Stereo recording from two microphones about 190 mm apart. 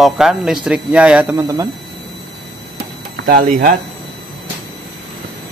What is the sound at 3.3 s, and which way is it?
Speech, 50° right (ahead or behind).